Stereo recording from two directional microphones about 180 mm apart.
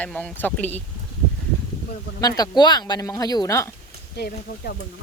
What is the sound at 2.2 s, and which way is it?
Speech, 20° left (ahead or behind).